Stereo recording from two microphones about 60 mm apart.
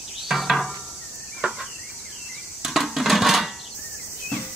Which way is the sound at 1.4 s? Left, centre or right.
Right.